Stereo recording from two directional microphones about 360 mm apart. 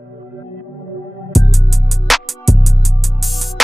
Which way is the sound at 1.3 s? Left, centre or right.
Centre.